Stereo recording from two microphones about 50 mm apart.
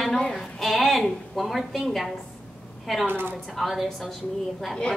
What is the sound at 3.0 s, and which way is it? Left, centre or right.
Speech, right.